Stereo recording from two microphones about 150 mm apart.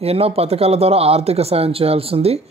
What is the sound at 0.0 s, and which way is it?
A man's voice, 40° right (ahead or behind).